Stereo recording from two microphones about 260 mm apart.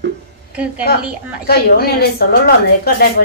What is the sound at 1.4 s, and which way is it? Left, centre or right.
A woman's voice, left.